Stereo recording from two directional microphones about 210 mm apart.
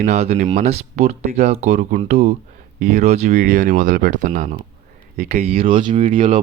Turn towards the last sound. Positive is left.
turn(degrees=-25)  # may be behind; listen again after turning